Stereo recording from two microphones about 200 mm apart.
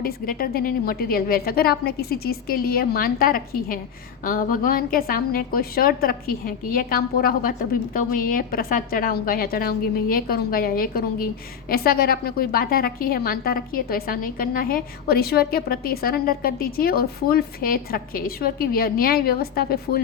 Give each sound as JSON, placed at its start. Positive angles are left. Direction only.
{"t": 0.0, "sound": "a woman's voice", "side_deg": 45}